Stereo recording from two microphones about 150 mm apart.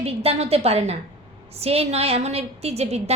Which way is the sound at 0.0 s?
40° right (ahead or behind).